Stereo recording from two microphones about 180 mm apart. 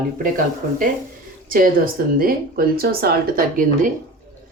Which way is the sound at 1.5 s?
55° right (ahead or behind).